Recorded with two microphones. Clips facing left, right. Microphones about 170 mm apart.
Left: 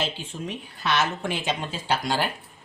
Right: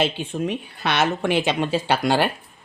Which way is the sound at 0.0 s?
65° right (ahead or behind).